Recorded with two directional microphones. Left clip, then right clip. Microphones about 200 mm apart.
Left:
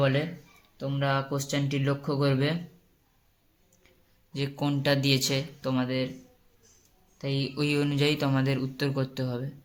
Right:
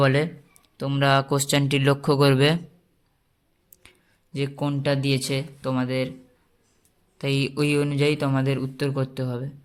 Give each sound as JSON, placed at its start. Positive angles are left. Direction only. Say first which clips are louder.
{"t": 0.0, "sound": "speech", "louder": "right 5 dB", "side_deg": -50}
{"t": 3.8, "sound": "a sound", "louder": "right 10 dB", "side_deg": -45}
{"t": 4.3, "sound": "speech", "louder": "right 3 dB", "side_deg": -25}
{"t": 7.2, "sound": "speech", "louder": "right 6 dB", "side_deg": -40}